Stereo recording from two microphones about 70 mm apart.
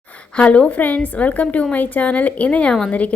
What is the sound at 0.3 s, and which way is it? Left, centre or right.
A woman's voice, centre.